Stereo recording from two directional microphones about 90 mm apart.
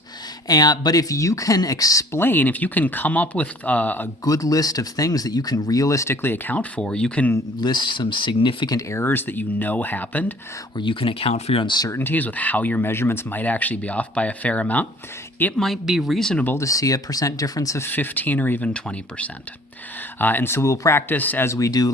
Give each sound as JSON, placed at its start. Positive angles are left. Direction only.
{"t": 0.4, "sound": "speech", "side_deg": 45}
{"t": 2.1, "sound": "speech", "side_deg": 25}
{"t": 4.2, "sound": "speech", "side_deg": 40}
{"t": 7.6, "sound": "speech", "side_deg": 60}
{"t": 8.9, "sound": "speech", "side_deg": 25}
{"t": 10.8, "sound": "speech", "side_deg": 80}
{"t": 11.9, "sound": "speech", "side_deg": 25}
{"t": 15.5, "sound": "speech", "side_deg": 0}
{"t": 16.6, "sound": "speech", "side_deg": 40}
{"t": 17.8, "sound": "speech", "side_deg": 20}
{"t": 21.1, "sound": "speech", "side_deg": 20}
{"t": 21.4, "sound": "speech", "side_deg": 35}